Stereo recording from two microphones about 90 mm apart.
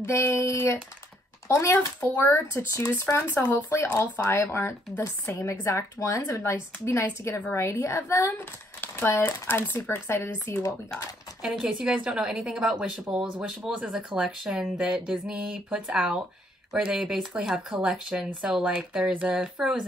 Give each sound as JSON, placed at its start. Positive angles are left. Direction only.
{"t": 0.0, "sound": "speech", "side_deg": 30}
{"t": 2.0, "sound": "speech", "side_deg": 20}
{"t": 11.4, "sound": "a woman's voice", "side_deg": -10}